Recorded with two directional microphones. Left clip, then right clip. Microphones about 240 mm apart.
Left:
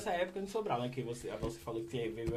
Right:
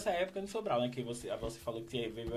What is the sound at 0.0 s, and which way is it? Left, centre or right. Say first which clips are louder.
Speech: right 1 dB; right.